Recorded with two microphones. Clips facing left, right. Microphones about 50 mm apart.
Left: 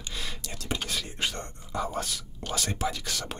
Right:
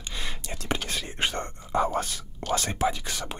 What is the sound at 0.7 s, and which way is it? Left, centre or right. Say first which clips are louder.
Whispering: right 2 dB; right.